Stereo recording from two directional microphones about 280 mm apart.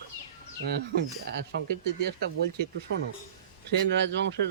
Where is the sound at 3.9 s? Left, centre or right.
Right.